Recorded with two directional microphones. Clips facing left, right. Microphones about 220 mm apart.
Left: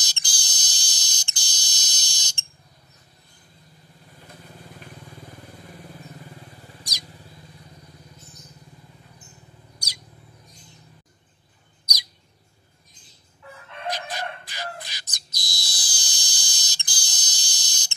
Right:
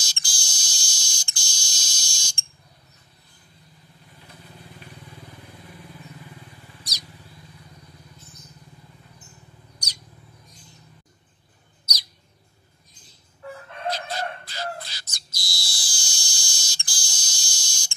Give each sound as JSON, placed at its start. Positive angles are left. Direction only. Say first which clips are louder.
{"t": 0.0, "sound": "fire alarm", "louder": "even", "side_deg": 20}
{"t": 6.8, "sound": "bird", "louder": "left 1 dB", "side_deg": 15}
{"t": 11.8, "sound": "bird", "louder": "even", "side_deg": 15}
{"t": 13.4, "sound": "fowl", "louder": "right 7 dB", "side_deg": -40}
{"t": 13.8, "sound": "bird", "louder": "right 2 dB", "side_deg": 15}